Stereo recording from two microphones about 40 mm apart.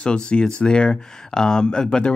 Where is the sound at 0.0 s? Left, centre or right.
Left.